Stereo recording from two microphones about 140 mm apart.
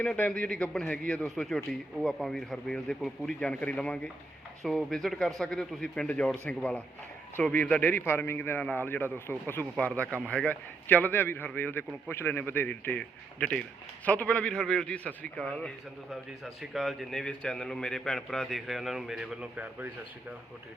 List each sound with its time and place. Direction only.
0.0 s a man's voice: 10° left (ahead or behind); by 19.9 s 10° right (ahead or behind)